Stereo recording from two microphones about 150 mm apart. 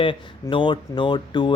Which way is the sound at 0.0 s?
35° left (ahead or behind).